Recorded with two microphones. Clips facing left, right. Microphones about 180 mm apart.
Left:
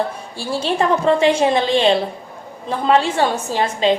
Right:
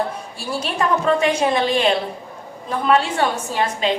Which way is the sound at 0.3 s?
30° left (ahead or behind).